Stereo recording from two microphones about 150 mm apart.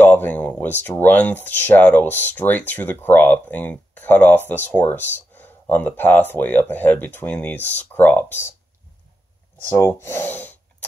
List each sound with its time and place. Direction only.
0.0 s speech: 10° left (ahead or behind)
9.6 s speech: 15° left (ahead or behind)